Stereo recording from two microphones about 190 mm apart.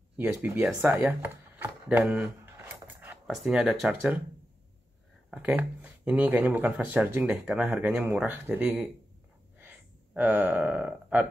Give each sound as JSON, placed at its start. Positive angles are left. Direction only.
{"t": 0.2, "sound": "speech", "side_deg": -10}
{"t": 5.3, "sound": "speech", "side_deg": -10}
{"t": 9.6, "sound": "burping", "side_deg": -10}